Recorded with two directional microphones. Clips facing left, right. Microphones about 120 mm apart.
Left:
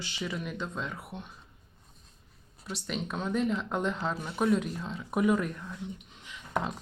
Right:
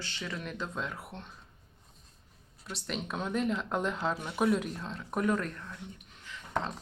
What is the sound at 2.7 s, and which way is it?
Speech, centre (ahead or behind).